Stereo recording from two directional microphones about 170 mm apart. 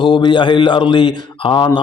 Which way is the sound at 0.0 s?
25° left (ahead or behind).